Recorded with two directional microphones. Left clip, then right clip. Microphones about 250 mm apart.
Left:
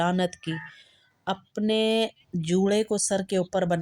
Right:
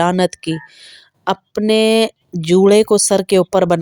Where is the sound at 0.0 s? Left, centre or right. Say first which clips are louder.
Right 11 dB; right.